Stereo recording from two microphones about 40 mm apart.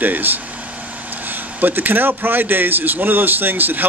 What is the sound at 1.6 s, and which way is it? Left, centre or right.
Speech, right.